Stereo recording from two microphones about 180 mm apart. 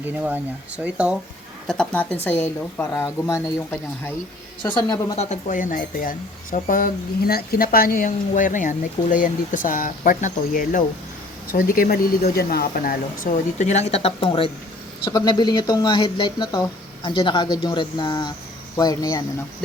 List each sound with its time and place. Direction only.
0.0 s speech: 10° right (ahead or behind)
1.6 s speech: 5° left (ahead or behind); by 5.1 s 20° left (ahead or behind)
5.1 s speech: 40° left (ahead or behind); by 19.2 s 20° left (ahead or behind)